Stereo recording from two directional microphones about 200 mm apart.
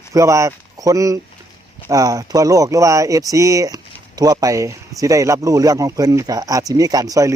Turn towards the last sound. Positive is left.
turn(degrees=-15)  # may be behind; listen again after turning